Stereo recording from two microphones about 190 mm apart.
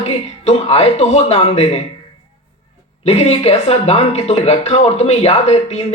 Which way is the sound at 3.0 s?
35° left (ahead or behind).